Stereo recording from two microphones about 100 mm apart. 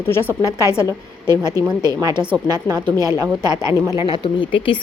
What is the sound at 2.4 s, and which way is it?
Speech, 40° right (ahead or behind).